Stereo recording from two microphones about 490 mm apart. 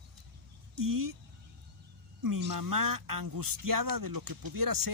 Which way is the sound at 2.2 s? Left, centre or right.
Right.